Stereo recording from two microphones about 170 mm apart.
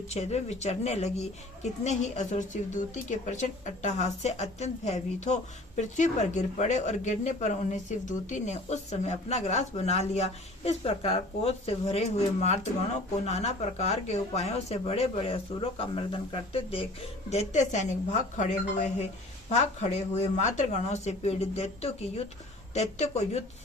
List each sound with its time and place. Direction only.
0.1 s a woman's voice: 40° left (ahead or behind)